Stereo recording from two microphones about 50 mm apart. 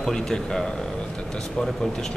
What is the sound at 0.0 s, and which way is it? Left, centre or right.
Speech, centre.